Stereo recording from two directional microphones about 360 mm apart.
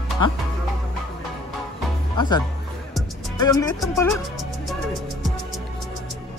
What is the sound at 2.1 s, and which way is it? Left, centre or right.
Speech, centre.